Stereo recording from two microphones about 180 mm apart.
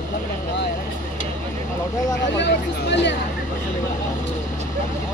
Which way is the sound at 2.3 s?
75° left (ahead or behind).